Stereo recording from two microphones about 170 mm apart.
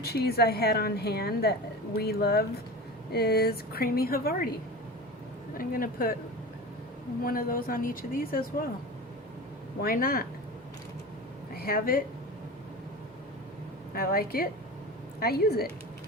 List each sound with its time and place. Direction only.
0.0 s a woman's voice: 70° left (ahead or behind)
5.5 s a woman's voice: 55° left (ahead or behind)
7.3 s a woman's voice: 55° left (ahead or behind)
9.8 s a woman's voice: 60° left (ahead or behind)
11.5 s a woman's voice: 60° left (ahead or behind)
13.9 s a woman's voice: 60° left (ahead or behind)